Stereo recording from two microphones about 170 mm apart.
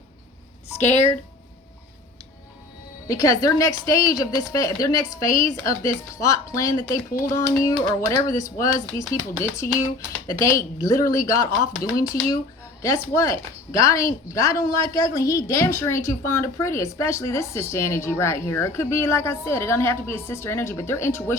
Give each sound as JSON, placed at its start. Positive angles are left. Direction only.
{"t": 0.8, "sound": "speech", "side_deg": 40}
{"t": 3.1, "sound": "a woman's voice", "side_deg": 20}